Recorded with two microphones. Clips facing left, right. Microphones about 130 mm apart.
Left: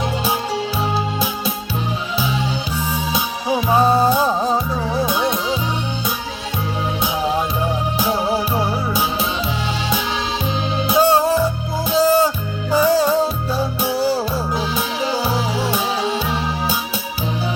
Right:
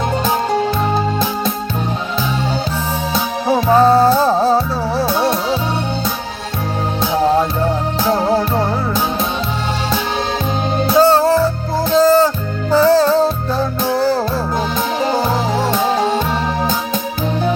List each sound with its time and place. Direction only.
0.5 s music: 50° right (ahead or behind)
3.7 s music: 10° left (ahead or behind)
4.4 s music: 35° right (ahead or behind)
7.1 s music: 40° right (ahead or behind)
7.6 s music: 15° left (ahead or behind)
8.1 s music: 55° right (ahead or behind)
10.8 s music: 10° left (ahead or behind)
15.0 s music: 45° right (ahead or behind)